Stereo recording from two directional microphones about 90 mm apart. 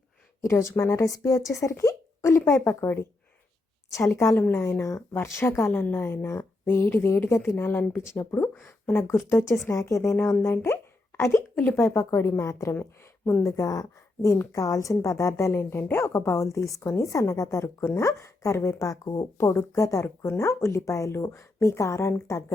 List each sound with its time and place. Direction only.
0.4 s speech: 30° left (ahead or behind)
1.8 s a sound: 35° left (ahead or behind)
2.5 s a woman's voice: 25° left (ahead or behind)
4.4 s a woman's voice: 25° left (ahead or behind)
10.5 s a sound: 25° left (ahead or behind)
11.8 s speech: 35° left (ahead or behind)